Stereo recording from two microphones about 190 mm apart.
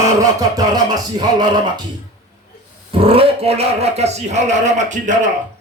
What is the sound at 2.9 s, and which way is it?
Speech, 30° right (ahead or behind).